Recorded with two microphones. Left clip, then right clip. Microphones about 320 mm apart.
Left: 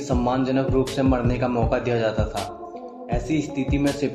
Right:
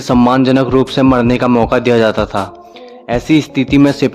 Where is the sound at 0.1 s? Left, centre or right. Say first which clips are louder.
Right 12 dB; right.